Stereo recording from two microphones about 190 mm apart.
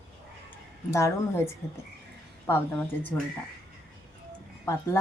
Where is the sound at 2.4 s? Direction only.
10° left (ahead or behind).